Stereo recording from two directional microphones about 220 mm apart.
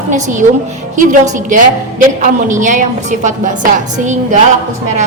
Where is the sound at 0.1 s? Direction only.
35° right (ahead or behind).